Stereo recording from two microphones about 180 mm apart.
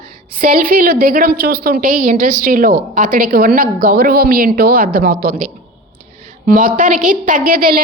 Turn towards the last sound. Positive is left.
turn(degrees=-55)  # may be behind; listen again after turning